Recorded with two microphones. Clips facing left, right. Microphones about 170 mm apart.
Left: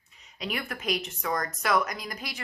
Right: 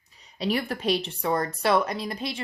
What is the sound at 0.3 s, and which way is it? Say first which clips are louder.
A woman's voice: right 7 dB; 35° right (ahead or behind).